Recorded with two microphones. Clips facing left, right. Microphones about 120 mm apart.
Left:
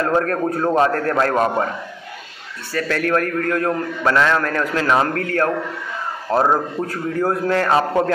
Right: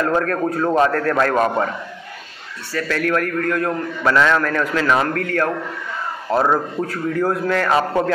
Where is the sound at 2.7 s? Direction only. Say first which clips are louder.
Left 1 dB; 45° left (ahead or behind).